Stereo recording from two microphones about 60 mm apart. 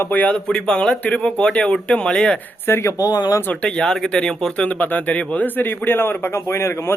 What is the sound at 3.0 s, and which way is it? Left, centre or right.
Speech, left.